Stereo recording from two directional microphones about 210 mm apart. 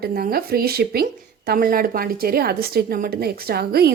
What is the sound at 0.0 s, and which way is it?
A woman's voice, 45° right (ahead or behind).